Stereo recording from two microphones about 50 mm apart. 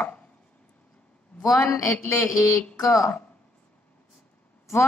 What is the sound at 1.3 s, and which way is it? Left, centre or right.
Speech, left.